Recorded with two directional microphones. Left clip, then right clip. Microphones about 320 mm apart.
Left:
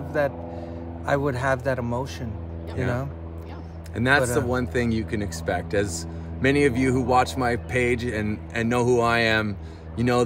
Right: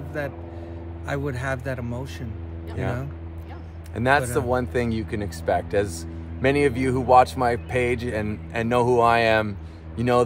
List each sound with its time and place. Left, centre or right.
0.2 s speech: centre
3.9 s a man's voice: centre